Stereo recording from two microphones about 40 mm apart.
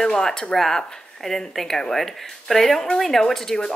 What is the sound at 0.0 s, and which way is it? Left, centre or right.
Speech, centre.